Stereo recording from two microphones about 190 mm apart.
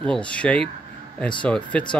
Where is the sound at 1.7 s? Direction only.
5° left (ahead or behind).